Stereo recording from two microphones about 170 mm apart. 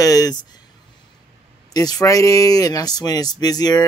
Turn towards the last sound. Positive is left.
turn(degrees=20)  # may be behind; listen again after turning